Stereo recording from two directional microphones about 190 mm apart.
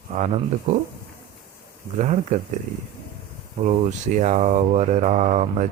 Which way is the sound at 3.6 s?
40° right (ahead or behind).